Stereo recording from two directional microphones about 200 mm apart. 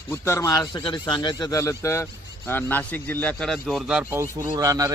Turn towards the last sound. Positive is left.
turn(degrees=-15)  # may be behind; listen again after turning